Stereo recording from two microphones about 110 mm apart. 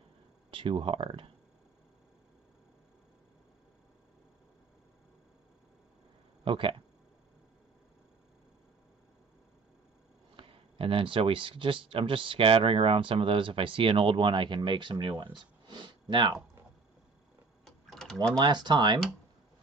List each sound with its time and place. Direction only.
0.5 s speech: 50° right (ahead or behind)
6.4 s speech: 50° right (ahead or behind)
10.3 s speech: 55° right (ahead or behind)
15.3 s a sound: 45° right (ahead or behind)
17.6 s a sound: 5° left (ahead or behind)
18.4 s speech: 40° right (ahead or behind)